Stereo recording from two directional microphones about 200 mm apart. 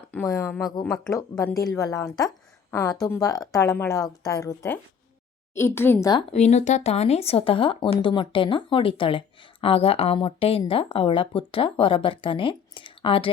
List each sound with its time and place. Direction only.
0.1 s speech: 5° left (ahead or behind)
1.1 s a woman's voice: 15° left (ahead or behind)
6.1 s speech: 35° left (ahead or behind)